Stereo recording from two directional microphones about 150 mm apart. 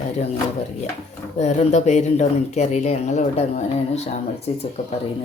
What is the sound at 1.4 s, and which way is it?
Speech, 50° left (ahead or behind).